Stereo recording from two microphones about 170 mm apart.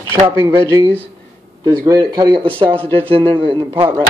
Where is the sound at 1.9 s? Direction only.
25° right (ahead or behind).